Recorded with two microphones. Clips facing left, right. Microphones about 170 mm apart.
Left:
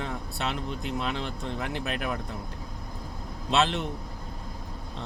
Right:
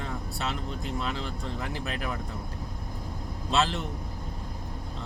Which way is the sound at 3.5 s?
65° left (ahead or behind).